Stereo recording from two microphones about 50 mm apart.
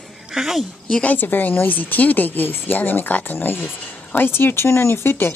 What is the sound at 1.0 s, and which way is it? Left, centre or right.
Speech, left.